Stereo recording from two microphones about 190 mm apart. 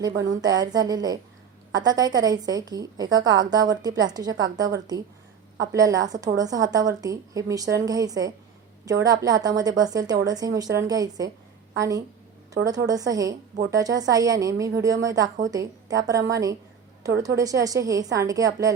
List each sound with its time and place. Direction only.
0.4 s a woman's voice: 20° right (ahead or behind)